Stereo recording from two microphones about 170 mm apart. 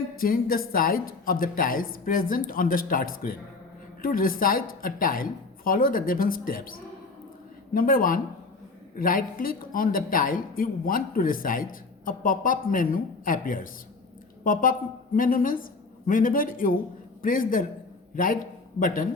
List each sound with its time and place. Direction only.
0.2 s a man's voice: 55° left (ahead or behind)